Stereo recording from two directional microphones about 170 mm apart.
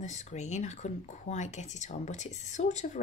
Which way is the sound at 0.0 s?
45° left (ahead or behind).